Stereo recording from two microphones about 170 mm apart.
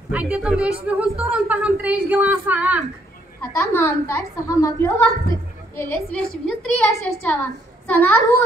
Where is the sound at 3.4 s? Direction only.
15° left (ahead or behind).